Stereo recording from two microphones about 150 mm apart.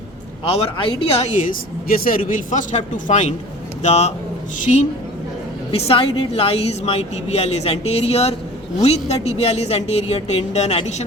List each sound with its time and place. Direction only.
0.5 s speech: 40° left (ahead or behind)
1.9 s a man's voice: 70° left (ahead or behind); by 4.1 s 50° left (ahead or behind)
5.7 s a woman's voice: 40° left (ahead or behind)